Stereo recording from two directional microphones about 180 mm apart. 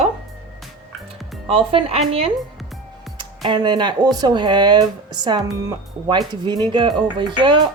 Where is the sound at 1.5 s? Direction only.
30° right (ahead or behind).